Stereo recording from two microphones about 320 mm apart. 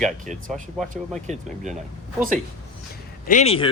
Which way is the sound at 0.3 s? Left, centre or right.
Right.